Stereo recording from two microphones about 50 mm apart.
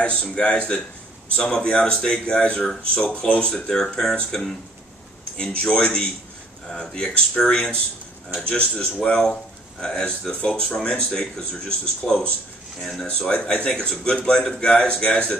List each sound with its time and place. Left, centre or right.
0.0 s a man's voice: left
13.3 s a man's voice: left